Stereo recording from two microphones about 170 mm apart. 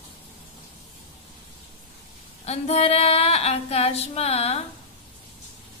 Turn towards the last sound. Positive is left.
turn(degrees=35)  # may be behind; listen again after turning